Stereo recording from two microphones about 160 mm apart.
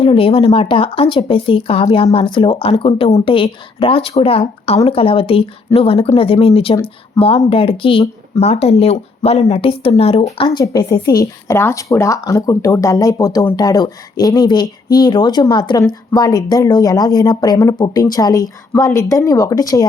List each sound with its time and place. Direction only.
0.0 s speech: 35° left (ahead or behind)
7.2 s speech: 20° left (ahead or behind)
7.5 s speech: 35° left (ahead or behind)